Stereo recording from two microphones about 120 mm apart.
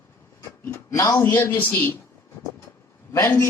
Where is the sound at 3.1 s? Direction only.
25° left (ahead or behind).